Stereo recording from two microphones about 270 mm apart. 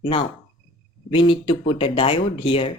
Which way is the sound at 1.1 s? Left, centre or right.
Centre.